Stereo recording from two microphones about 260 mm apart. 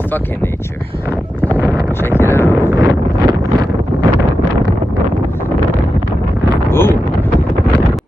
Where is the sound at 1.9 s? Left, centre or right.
Centre.